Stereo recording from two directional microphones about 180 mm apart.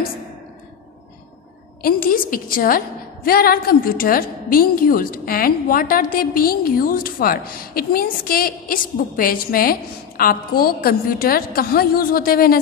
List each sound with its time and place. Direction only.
1.8 s a woman's voice: 55° left (ahead or behind)